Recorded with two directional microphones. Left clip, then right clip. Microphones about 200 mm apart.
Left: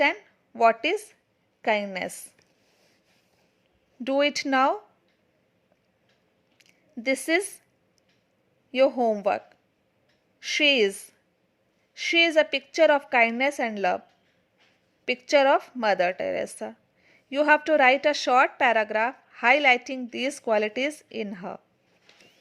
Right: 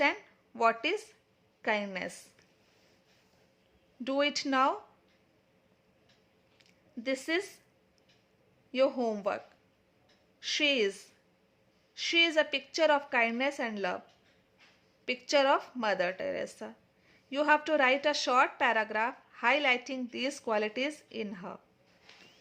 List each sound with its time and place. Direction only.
0.0 s a woman's voice: 20° left (ahead or behind)
4.0 s a woman's voice: 20° left (ahead or behind)
6.6 s speech: 25° left (ahead or behind)
8.7 s a woman's voice: 20° left (ahead or behind)
10.4 s a woman's voice: 25° left (ahead or behind)
15.0 s a woman's voice: 20° left (ahead or behind)